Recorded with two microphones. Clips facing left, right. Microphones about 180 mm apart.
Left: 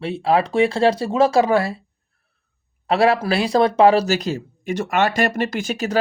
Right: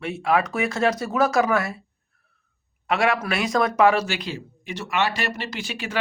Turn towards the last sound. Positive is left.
turn(degrees=40)  # may be behind; listen again after turning